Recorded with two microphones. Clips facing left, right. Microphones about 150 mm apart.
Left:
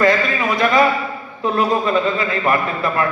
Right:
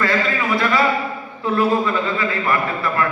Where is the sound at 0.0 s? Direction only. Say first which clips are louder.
Left 4 dB; 15° left (ahead or behind).